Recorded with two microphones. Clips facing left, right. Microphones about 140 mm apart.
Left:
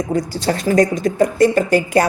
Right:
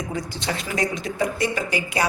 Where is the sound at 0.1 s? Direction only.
40° left (ahead or behind).